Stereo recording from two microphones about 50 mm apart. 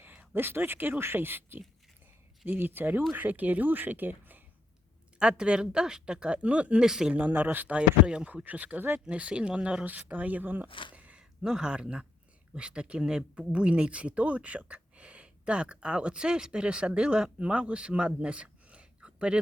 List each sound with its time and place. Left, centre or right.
0.0 s speech: right
5.2 s speech: centre
6.8 s speech: centre
7.1 s speech: right
7.8 s speech: centre
8.4 s speech: right
9.0 s speech: right
11.2 s speech: centre